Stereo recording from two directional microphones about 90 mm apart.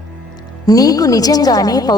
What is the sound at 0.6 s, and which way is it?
A man's voice, 40° left (ahead or behind).